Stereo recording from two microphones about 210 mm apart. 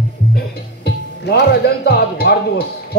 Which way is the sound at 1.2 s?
50° left (ahead or behind).